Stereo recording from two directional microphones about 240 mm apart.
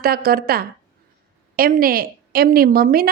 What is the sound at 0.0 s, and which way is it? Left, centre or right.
A woman's voice, right.